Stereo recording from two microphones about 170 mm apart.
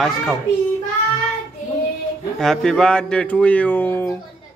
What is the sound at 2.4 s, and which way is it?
Speech, centre (ahead or behind).